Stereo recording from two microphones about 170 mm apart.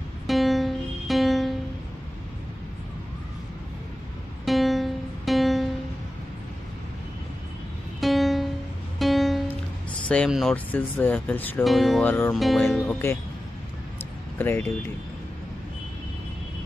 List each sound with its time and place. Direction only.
0.3 s music: centre (ahead or behind)
4.5 s music: centre (ahead or behind)
8.0 s music: centre (ahead or behind)
10.0 s speech: 5° left (ahead or behind)
11.6 s music: centre (ahead or behind)
12.1 s speech: 10° left (ahead or behind)
12.4 s music: centre (ahead or behind)
12.8 s speech: 15° left (ahead or behind)
14.4 s speech: 10° left (ahead or behind)